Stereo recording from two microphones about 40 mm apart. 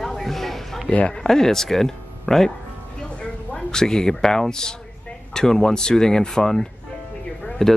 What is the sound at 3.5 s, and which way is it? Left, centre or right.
Speech, centre.